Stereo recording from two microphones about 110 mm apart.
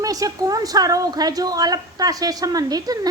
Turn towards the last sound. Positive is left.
turn(degrees=-35)  # may be behind; listen again after turning